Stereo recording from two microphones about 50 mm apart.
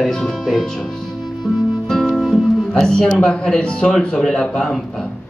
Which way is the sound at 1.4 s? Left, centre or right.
Centre.